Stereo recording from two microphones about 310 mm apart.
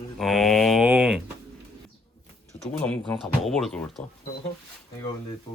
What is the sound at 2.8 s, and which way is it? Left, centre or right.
Speech, centre.